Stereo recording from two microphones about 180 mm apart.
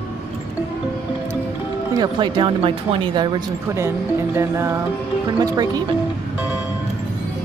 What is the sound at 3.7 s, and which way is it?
Speech, 15° right (ahead or behind).